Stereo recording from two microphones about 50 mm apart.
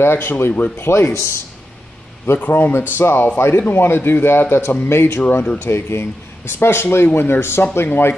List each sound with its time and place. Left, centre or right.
0.0 s speech: left
0.3 s a man's voice: left
0.7 s speech: left
2.3 s a man's voice: left